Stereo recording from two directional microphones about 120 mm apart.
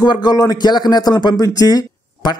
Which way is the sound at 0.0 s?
35° left (ahead or behind).